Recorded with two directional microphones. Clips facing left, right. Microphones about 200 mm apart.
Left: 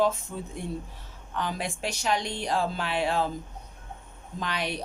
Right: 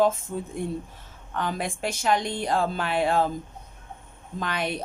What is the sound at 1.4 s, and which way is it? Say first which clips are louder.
Speech: right 3 dB; 50° right (ahead or behind).